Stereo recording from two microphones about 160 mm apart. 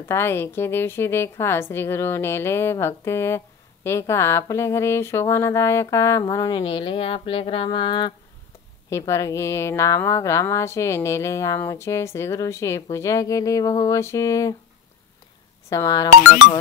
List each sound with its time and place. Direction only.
0.1 s a woman's voice: 15° left (ahead or behind)
8.9 s a woman's voice: 20° left (ahead or behind)
15.7 s speech: 20° left (ahead or behind)